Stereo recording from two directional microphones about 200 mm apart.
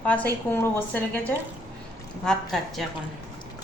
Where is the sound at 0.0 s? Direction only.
10° left (ahead or behind).